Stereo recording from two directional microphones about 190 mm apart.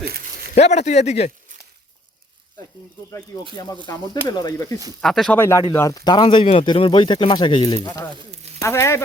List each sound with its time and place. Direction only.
0.5 s a man's voice: 35° left (ahead or behind)
3.8 s speech: 20° left (ahead or behind)
4.9 s speech: centre (ahead or behind)
5.4 s speech: 15° left (ahead or behind)